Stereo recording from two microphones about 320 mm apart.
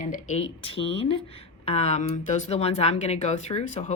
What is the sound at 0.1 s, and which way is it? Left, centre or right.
Speech, centre.